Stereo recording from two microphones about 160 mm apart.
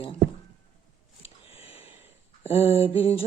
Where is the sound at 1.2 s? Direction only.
35° left (ahead or behind).